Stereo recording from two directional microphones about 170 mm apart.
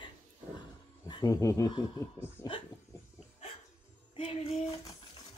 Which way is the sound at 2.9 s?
15° left (ahead or behind).